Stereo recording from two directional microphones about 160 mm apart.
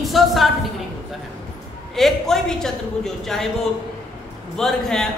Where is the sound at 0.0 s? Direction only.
Centre (ahead or behind).